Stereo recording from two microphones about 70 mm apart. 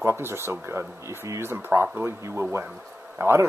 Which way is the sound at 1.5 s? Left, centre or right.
Right.